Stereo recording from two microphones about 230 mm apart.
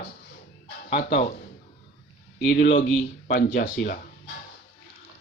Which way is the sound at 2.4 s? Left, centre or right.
Left.